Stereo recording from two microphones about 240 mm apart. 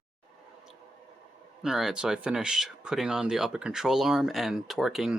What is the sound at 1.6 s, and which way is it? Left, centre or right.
Speech, centre.